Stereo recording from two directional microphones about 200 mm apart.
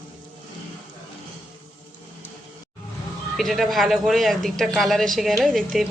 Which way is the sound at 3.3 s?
Centre (ahead or behind).